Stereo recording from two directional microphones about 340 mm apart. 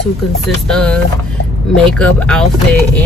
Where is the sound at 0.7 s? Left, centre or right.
Centre.